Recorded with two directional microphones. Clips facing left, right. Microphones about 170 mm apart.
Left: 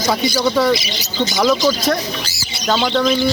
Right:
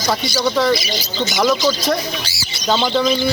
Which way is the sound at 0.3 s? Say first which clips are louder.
Even; centre (ahead or behind).